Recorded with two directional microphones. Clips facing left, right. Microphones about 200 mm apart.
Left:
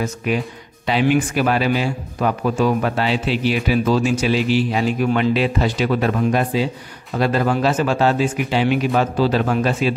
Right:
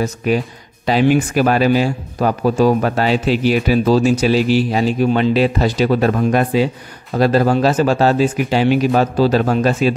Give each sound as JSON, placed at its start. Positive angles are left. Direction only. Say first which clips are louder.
{"t": 0.0, "sound": "a man's voice", "louder": "right 4 dB", "side_deg": -35}
{"t": 6.3, "sound": "a man's voice", "louder": "right 4 dB", "side_deg": -60}
{"t": 7.2, "sound": "a man's voice", "louder": "right 5 dB", "side_deg": -35}